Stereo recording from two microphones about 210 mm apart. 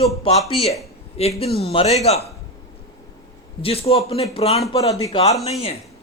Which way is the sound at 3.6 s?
30° left (ahead or behind).